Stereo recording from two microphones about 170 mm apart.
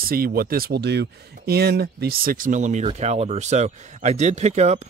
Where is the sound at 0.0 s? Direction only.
60° right (ahead or behind); by 4.8 s 40° right (ahead or behind).